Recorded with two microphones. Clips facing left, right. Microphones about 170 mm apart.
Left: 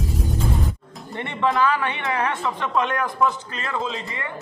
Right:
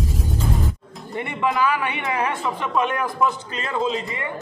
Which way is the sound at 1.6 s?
15° right (ahead or behind).